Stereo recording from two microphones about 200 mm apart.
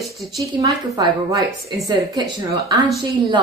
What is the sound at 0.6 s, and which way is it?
Speech, 20° right (ahead or behind).